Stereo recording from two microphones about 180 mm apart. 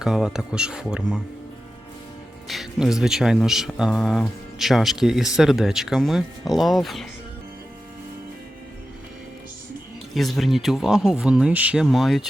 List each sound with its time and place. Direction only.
0.0 s speech: 5° right (ahead or behind)
2.5 s speech: centre (ahead or behind)
10.2 s speech: centre (ahead or behind)